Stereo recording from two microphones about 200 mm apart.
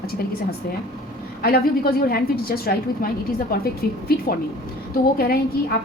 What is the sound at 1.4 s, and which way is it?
A woman's voice, 50° left (ahead or behind).